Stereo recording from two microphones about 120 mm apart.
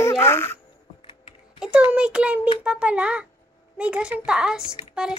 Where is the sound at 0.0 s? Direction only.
20° left (ahead or behind).